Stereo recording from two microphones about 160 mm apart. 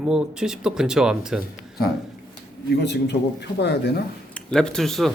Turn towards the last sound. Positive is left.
turn(degrees=0)  # may be behind; listen again after turning